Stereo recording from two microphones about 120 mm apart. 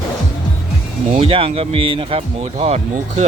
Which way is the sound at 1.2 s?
50° right (ahead or behind).